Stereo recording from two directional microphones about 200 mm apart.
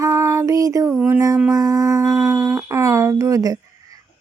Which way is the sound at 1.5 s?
15° right (ahead or behind).